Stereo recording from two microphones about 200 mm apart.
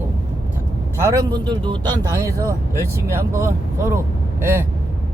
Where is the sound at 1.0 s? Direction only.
15° right (ahead or behind).